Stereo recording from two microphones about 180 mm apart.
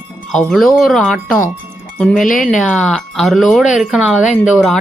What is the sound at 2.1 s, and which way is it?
Speech, 50° left (ahead or behind).